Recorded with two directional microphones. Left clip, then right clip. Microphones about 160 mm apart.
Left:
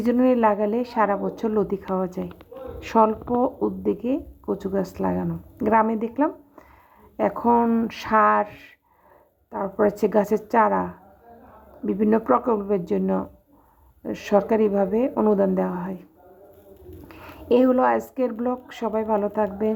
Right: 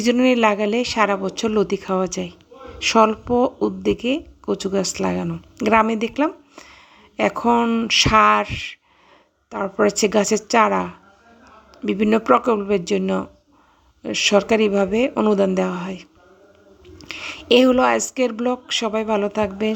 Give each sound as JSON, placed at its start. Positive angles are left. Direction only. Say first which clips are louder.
{"t": 0.1, "sound": "speech", "louder": "right 3 dB", "side_deg": -40}
{"t": 9.5, "sound": "speech", "louder": "right 3 dB", "side_deg": -35}
{"t": 17.5, "sound": "speech", "louder": "right 4 dB", "side_deg": -40}